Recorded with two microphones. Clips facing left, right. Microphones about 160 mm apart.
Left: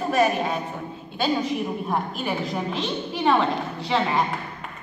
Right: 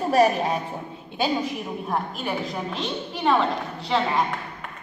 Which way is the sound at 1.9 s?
Centre (ahead or behind).